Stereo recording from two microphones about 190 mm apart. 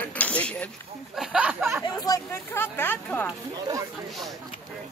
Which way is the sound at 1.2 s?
5° right (ahead or behind).